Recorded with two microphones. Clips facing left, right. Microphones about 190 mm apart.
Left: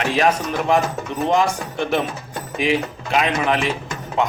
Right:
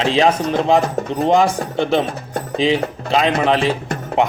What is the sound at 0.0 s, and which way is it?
Speech, 25° right (ahead or behind).